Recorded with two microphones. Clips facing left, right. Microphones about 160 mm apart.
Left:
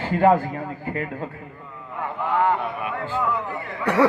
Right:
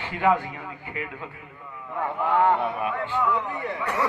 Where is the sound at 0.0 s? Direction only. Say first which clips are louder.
Left 5 dB; 40° left (ahead or behind).